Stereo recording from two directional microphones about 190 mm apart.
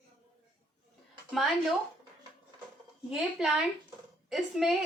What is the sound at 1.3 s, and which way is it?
Speech, centre (ahead or behind).